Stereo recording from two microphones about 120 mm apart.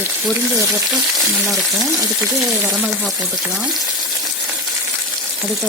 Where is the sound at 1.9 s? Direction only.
25° right (ahead or behind).